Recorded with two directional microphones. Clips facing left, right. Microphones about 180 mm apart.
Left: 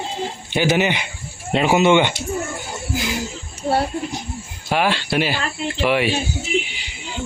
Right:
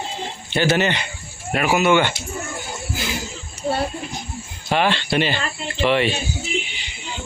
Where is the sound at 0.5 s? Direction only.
15° left (ahead or behind).